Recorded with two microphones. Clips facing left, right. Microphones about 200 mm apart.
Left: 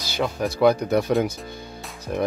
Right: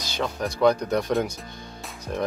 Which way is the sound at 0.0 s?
5° left (ahead or behind).